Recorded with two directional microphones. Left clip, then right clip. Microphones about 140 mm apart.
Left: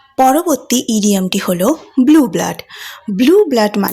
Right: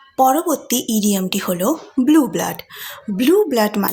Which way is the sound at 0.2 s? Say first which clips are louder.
Left 4 dB; 40° left (ahead or behind).